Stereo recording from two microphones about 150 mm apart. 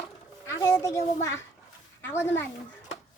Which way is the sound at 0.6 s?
20° left (ahead or behind).